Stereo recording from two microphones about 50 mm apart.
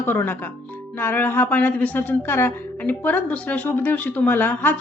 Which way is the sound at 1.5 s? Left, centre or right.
Left.